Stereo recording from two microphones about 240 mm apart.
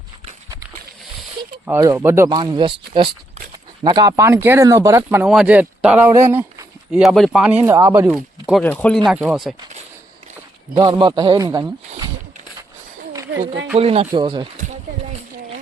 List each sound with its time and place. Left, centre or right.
1.6 s speech: centre
10.8 s a man's voice: centre
13.7 s a man's voice: right